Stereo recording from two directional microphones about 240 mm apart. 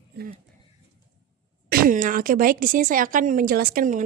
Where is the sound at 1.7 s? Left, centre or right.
Right.